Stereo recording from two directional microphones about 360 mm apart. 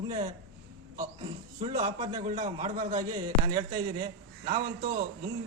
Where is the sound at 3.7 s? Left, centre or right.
Right.